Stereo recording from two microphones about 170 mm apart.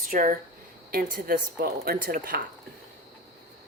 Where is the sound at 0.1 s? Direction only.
55° right (ahead or behind).